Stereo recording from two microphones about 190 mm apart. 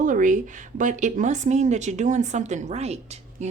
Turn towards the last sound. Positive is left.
turn(degrees=-35)  # may be behind; listen again after turning